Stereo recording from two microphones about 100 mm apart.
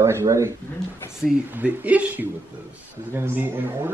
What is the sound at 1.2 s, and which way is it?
Speech, centre (ahead or behind).